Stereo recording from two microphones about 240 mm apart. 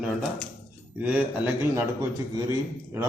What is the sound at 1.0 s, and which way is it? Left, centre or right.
Mantra, centre.